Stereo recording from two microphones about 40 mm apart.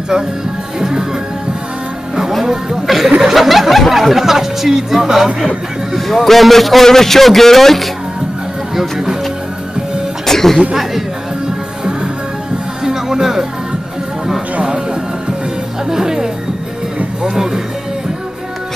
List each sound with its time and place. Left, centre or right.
0.7 s music: centre
2.4 s speech: centre
5.9 s a man's voice: centre
10.2 s music: centre
12.8 s music: centre
15.9 s music: centre